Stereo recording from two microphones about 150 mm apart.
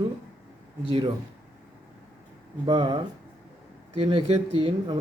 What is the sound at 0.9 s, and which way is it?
Speech, 30° right (ahead or behind).